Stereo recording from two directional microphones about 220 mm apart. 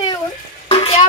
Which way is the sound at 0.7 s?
25° left (ahead or behind).